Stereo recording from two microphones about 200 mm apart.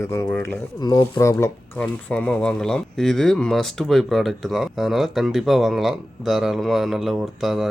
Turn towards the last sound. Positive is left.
turn(degrees=0)  # may be behind; listen again after turning